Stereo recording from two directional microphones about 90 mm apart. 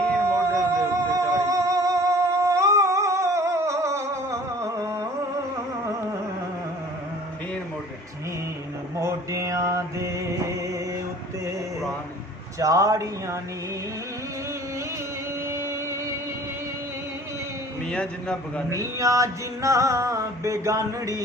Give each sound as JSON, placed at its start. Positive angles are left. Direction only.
{"t": 0.2, "sound": "music", "side_deg": -30}
{"t": 9.0, "sound": "mantra", "side_deg": -35}
{"t": 12.5, "sound": "music", "side_deg": -35}
{"t": 15.4, "sound": "music", "side_deg": -30}
{"t": 17.9, "sound": "a man's voice", "side_deg": 10}
{"t": 18.7, "sound": "music", "side_deg": -35}